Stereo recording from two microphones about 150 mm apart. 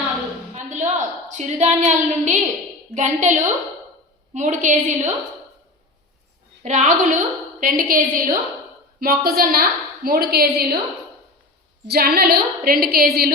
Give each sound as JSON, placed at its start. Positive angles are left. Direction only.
{"t": 0.5, "sound": "a sound", "side_deg": -50}
{"t": 2.9, "sound": "a woman's voice", "side_deg": -55}
{"t": 6.6, "sound": "a woman's voice", "side_deg": -55}
{"t": 9.0, "sound": "a woman's voice", "side_deg": -80}
{"t": 11.9, "sound": "a woman's voice", "side_deg": -90}